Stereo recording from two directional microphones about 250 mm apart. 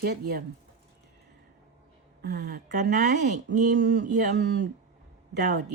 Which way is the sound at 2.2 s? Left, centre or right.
Right.